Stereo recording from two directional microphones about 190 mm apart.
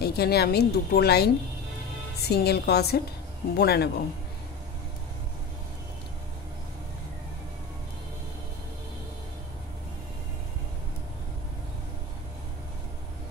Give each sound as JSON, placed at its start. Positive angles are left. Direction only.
{"t": 0.0, "sound": "a woman's voice", "side_deg": 55}